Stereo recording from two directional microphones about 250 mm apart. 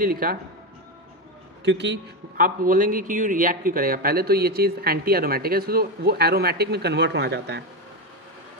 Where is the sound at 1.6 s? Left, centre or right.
Right.